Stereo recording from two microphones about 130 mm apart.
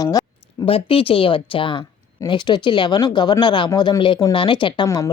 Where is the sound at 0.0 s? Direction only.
30° left (ahead or behind).